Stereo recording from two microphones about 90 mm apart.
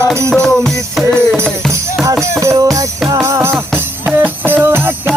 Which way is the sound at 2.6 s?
40° right (ahead or behind).